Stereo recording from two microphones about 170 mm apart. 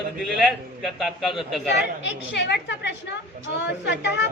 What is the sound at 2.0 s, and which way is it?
Speech, 90° left.